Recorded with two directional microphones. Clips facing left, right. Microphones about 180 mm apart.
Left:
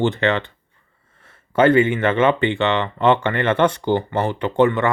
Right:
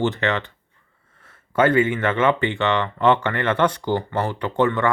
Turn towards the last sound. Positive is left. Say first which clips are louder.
# left 3 dB
turn(degrees=25)  # may be behind; listen again after turning